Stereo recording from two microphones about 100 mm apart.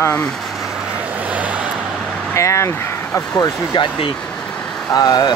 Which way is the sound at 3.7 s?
50° left (ahead or behind).